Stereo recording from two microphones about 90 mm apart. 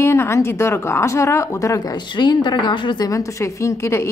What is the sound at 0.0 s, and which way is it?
A woman's voice, 30° left (ahead or behind).